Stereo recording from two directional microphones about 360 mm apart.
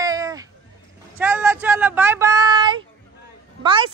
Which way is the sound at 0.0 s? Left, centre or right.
Centre.